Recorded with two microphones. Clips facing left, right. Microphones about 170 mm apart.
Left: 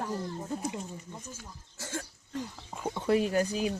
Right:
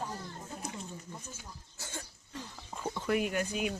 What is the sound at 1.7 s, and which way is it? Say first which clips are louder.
Cough: left 8 dB; 90° left.